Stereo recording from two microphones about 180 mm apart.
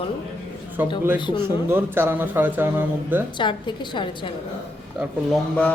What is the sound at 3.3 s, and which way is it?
Speech, 25° left (ahead or behind).